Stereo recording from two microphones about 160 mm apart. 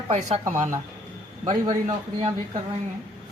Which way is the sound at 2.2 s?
35° right (ahead or behind).